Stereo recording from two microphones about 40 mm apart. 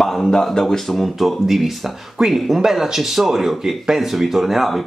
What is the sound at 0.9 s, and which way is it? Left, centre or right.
Speech, centre.